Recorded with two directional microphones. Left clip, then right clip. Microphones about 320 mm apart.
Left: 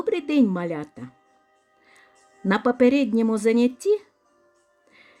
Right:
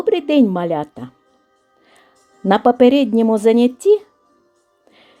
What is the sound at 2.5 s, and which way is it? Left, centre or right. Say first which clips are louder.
A woman's voice: right 8 dB; centre.